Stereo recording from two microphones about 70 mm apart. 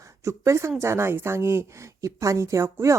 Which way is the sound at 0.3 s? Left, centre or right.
Right.